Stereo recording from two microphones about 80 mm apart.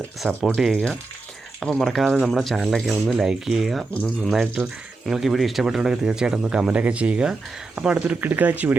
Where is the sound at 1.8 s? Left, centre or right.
Centre.